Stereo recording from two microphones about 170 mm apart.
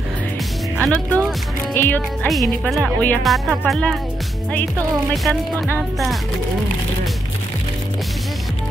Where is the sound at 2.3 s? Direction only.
Centre (ahead or behind).